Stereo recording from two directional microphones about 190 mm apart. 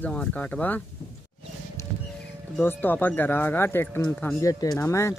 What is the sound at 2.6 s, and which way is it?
Speech, 10° left (ahead or behind).